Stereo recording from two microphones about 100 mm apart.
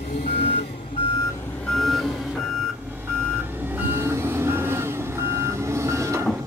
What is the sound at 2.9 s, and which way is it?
Reversing beeps, 20° right (ahead or behind).